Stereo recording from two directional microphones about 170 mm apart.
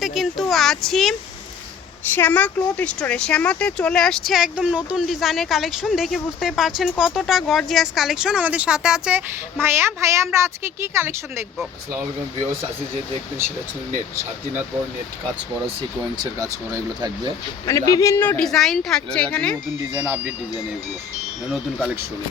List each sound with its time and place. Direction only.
0.0 s a child's voice: centre (ahead or behind)
2.0 s speech: 10° left (ahead or behind); by 11.4 s 15° right (ahead or behind)
16.1 s speech: 20° right (ahead or behind)
17.7 s speech: 20° left (ahead or behind)
19.9 s speech: 20° right (ahead or behind)